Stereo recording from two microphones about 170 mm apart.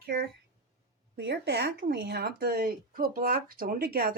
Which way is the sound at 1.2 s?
75° right (ahead or behind).